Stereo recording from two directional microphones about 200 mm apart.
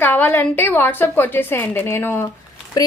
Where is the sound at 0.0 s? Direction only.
10° left (ahead or behind).